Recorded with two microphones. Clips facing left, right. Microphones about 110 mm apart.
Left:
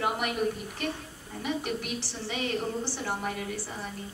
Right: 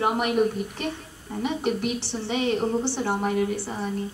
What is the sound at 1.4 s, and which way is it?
A woman's voice, 25° right (ahead or behind).